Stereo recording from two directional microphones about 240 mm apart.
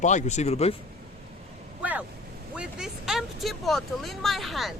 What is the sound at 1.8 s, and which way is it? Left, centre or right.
Vehicle, centre.